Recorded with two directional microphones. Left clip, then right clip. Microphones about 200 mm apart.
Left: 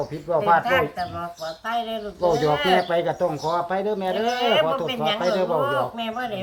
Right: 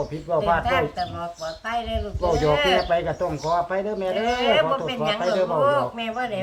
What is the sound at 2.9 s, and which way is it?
Speech, 55° left (ahead or behind).